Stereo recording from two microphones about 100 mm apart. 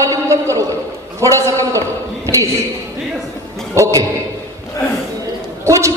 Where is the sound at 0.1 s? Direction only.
35° right (ahead or behind).